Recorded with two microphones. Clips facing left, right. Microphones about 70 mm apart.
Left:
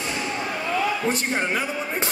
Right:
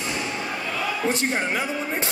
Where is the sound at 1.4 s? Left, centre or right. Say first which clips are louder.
Even; left.